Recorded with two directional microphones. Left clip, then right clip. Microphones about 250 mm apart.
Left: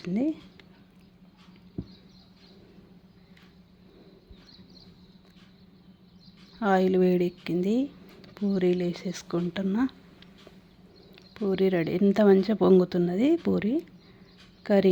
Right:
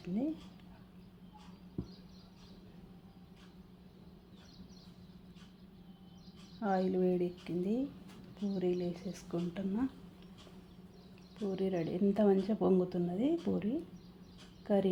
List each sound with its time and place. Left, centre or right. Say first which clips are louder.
0.0 s speech: left 9 dB; left
6.6 s speech: left 10 dB; left
11.4 s speech: left 11 dB; left